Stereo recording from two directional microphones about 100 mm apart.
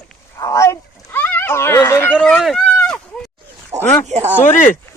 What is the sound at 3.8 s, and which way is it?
Speech, 25° left (ahead or behind).